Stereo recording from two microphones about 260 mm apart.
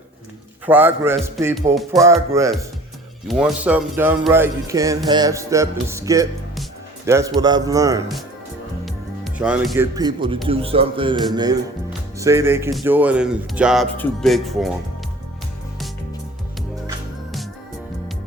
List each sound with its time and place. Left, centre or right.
0.6 s speech: centre
2.3 s speech: centre
8.8 s speech: centre
12.2 s speech: centre